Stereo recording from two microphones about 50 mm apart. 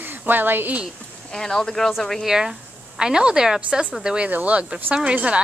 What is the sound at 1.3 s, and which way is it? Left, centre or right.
Speech, centre.